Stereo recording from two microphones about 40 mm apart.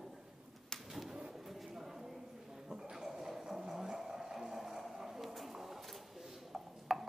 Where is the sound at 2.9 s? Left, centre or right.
Centre.